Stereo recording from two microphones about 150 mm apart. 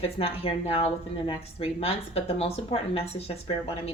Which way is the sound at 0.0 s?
40° left (ahead or behind).